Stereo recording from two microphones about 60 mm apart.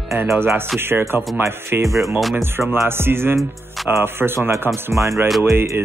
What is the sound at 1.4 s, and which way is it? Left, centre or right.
Speech, right.